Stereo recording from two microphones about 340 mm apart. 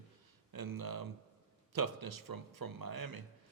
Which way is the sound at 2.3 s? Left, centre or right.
Right.